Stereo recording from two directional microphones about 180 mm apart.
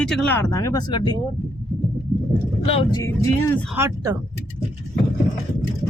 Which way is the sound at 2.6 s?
35° left (ahead or behind).